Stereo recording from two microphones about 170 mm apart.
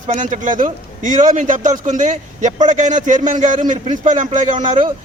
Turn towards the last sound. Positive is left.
turn(degrees=-45)  # may be behind; listen again after turning